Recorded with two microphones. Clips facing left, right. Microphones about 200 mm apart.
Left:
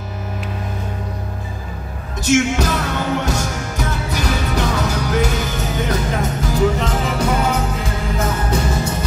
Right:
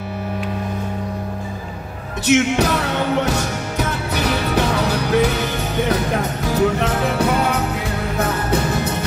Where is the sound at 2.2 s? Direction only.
60° right (ahead or behind).